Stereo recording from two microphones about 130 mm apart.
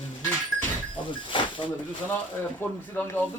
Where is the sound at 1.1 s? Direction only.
40° left (ahead or behind).